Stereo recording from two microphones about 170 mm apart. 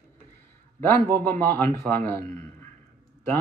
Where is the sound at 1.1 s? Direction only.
15° left (ahead or behind).